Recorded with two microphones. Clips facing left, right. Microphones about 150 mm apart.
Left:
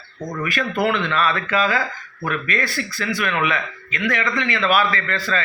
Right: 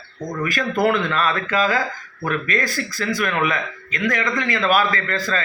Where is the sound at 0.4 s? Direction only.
40° right (ahead or behind).